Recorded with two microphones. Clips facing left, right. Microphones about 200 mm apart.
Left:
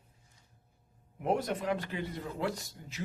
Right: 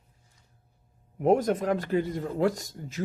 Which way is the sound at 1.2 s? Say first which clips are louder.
Right 8 dB; 45° right (ahead or behind).